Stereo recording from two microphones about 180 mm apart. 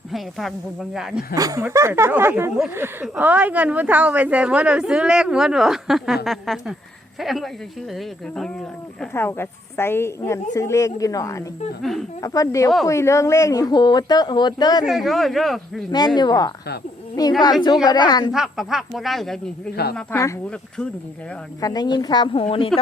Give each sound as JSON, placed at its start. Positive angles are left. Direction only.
{"t": 0.1, "sound": "speech", "side_deg": 0}
{"t": 1.4, "sound": "a woman's voice", "side_deg": -20}
{"t": 11.8, "sound": "speech", "side_deg": 0}
{"t": 12.2, "sound": "speech", "side_deg": 20}
{"t": 14.8, "sound": "speech", "side_deg": 0}
{"t": 15.9, "sound": "speech", "side_deg": 25}
{"t": 18.3, "sound": "speech", "side_deg": 0}
{"t": 19.7, "sound": "a woman's voice", "side_deg": 60}
{"t": 20.0, "sound": "a woman's voice", "side_deg": 15}
{"t": 21.6, "sound": "speech", "side_deg": 20}